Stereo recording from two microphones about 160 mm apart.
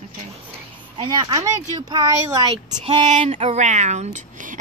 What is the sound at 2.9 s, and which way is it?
Speech, 40° right (ahead or behind).